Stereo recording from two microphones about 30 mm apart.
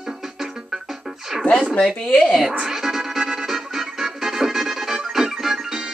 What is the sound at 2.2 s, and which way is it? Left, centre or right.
Speech, centre.